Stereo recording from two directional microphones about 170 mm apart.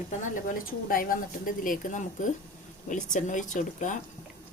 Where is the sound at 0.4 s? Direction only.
55° left (ahead or behind).